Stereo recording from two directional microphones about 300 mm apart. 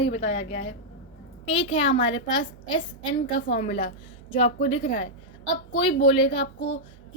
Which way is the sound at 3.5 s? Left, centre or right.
Left.